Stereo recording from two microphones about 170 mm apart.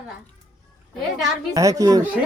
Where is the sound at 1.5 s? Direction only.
20° right (ahead or behind).